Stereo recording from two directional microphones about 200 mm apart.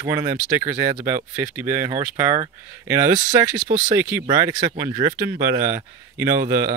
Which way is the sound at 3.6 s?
40° right (ahead or behind).